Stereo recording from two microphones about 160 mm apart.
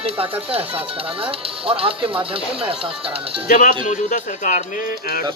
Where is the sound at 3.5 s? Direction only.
55° left (ahead or behind).